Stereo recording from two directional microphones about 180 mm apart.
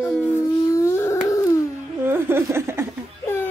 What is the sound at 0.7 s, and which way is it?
Dog, 15° left (ahead or behind).